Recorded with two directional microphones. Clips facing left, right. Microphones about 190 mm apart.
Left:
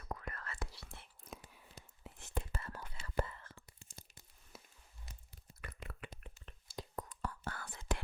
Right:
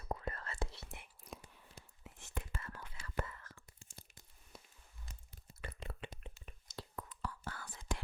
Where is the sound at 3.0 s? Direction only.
30° left (ahead or behind).